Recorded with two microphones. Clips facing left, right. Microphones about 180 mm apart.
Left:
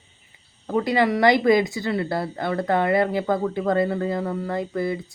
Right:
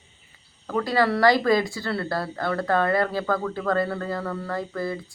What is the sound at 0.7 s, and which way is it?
Speech, 20° left (ahead or behind).